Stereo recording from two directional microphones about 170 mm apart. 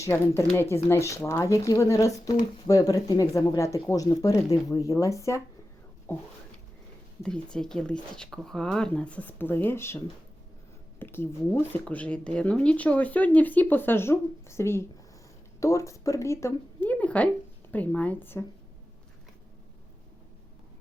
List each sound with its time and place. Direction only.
0.0 s speech: 15° left (ahead or behind)
7.5 s speech: 5° left (ahead or behind)
11.0 s speech: 15° left (ahead or behind)